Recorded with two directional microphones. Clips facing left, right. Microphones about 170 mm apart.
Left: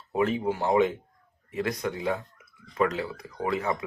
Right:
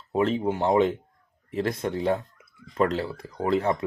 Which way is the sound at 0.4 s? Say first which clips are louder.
Right 2 dB; 25° right (ahead or behind).